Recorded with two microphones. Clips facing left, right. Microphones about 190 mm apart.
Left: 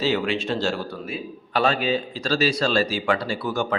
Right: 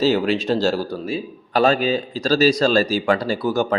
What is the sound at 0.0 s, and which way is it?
A man's voice, 40° right (ahead or behind).